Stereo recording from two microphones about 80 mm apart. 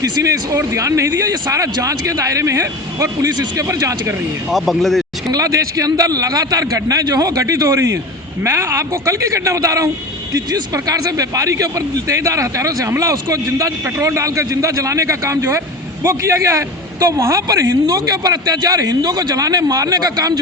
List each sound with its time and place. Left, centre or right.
0.0 s a man's voice: right
4.5 s speech: centre
5.3 s a man's voice: right